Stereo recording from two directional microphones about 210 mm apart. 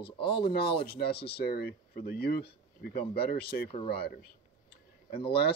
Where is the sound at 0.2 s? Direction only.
25° left (ahead or behind).